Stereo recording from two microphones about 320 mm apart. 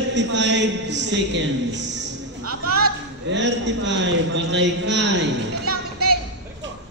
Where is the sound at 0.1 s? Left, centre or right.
Right.